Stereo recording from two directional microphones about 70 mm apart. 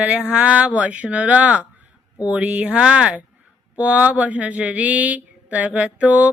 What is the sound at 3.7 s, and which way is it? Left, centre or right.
Speech, centre.